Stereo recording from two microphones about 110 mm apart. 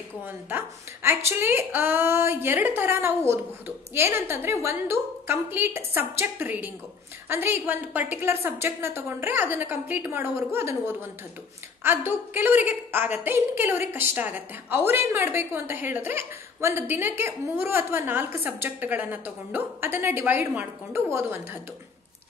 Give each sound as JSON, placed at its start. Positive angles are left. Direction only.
{"t": 0.2, "sound": "a woman's voice", "side_deg": -20}